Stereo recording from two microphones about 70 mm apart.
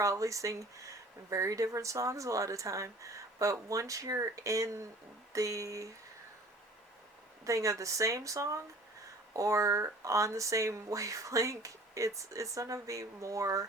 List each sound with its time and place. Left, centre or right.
0.0 s speech: right
7.4 s speech: right